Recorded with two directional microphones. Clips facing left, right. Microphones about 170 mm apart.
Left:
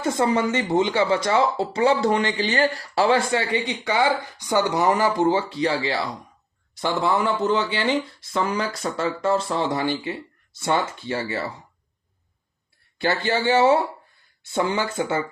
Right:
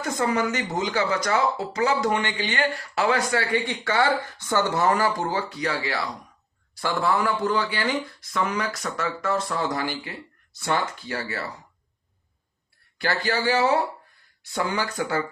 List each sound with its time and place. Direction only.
0.0 s speech: 25° left (ahead or behind)
13.0 s speech: 25° left (ahead or behind)